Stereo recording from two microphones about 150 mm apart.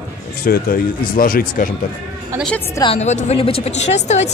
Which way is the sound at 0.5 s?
70° left (ahead or behind).